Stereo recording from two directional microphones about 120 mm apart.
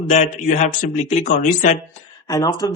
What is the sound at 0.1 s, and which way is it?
Speech, 90° left.